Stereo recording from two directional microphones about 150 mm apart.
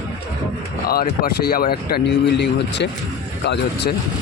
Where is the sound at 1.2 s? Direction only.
85° left.